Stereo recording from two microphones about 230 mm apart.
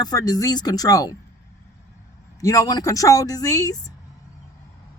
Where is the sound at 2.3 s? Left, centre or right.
Centre.